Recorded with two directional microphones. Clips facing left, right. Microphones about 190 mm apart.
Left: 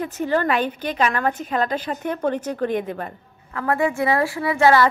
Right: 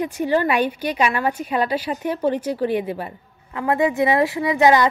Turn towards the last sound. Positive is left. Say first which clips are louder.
# right 1 dB
turn(degrees=-20)  # may be behind; listen again after turning